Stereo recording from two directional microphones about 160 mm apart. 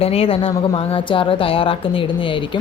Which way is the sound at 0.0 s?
35° left (ahead or behind).